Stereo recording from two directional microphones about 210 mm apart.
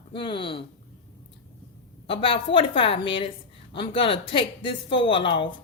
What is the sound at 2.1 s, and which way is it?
Speech, 25° left (ahead or behind).